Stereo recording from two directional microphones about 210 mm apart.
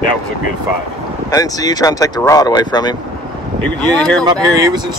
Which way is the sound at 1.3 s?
15° left (ahead or behind).